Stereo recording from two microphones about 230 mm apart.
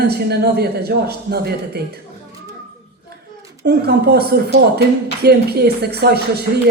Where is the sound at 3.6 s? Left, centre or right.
Right.